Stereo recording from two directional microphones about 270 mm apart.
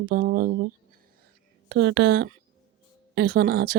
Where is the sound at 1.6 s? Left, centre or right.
Right.